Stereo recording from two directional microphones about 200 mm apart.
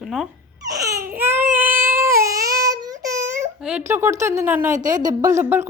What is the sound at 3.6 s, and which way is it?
Speech, 10° right (ahead or behind).